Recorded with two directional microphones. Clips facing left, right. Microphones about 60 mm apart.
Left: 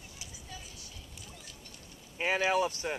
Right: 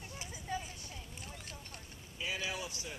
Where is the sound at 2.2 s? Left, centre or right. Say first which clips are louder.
Left 11 dB; left.